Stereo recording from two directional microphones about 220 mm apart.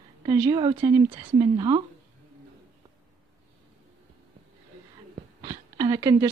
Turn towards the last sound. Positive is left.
turn(degrees=-15)  # may be behind; listen again after turning